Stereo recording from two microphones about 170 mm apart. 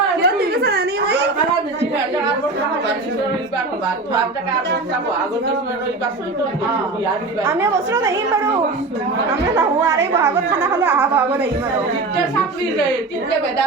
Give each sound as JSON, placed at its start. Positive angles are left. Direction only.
{"t": 0.2, "sound": "a sound", "side_deg": -70}
{"t": 7.4, "sound": "a woman's voice", "side_deg": -15}
{"t": 9.6, "sound": "a woman's voice", "side_deg": -15}